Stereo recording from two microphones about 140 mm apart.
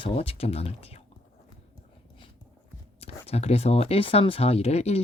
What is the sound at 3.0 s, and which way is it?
Speech, 50° left (ahead or behind).